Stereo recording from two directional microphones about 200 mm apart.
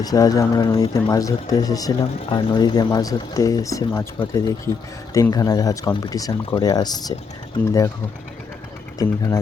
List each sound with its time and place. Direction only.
0.0 s speech: 20° left (ahead or behind)
9.0 s speech: 15° left (ahead or behind)